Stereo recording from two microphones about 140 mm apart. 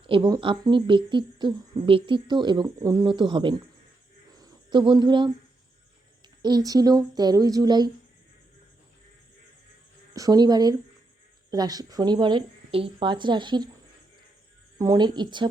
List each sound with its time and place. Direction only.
0.1 s speech: 30° right (ahead or behind)
4.3 s a sound: 30° right (ahead or behind)
6.4 s speech: 30° right (ahead or behind)
10.2 s speech: 25° right (ahead or behind)
14.8 s speech: 30° right (ahead or behind)